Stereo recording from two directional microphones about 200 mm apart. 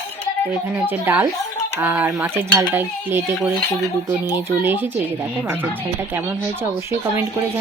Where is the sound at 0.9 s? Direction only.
10° right (ahead or behind).